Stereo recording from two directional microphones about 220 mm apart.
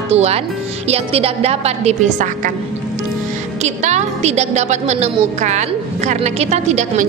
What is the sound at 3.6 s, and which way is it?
A woman's voice, 30° right (ahead or behind).